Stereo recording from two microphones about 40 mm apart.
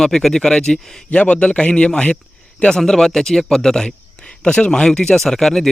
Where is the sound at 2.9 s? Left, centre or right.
Centre.